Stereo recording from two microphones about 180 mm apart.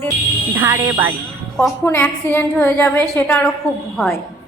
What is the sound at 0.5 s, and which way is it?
Speech, 15° right (ahead or behind).